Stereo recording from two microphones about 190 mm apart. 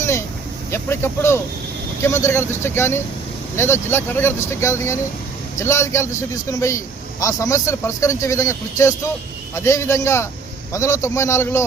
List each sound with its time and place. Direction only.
0.0 s vehicle: 15° left (ahead or behind)
0.7 s a man's voice: 15° left (ahead or behind)